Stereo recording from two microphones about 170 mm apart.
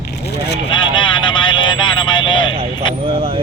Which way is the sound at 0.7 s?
30° left (ahead or behind).